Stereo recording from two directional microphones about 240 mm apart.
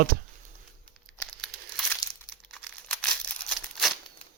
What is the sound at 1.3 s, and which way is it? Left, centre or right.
Crumpling, centre.